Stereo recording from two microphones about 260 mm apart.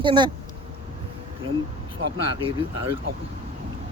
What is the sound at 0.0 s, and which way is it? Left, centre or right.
Speech, centre.